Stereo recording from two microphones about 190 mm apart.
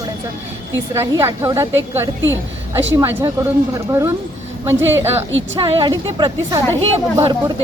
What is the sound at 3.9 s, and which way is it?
Speech, 15° right (ahead or behind).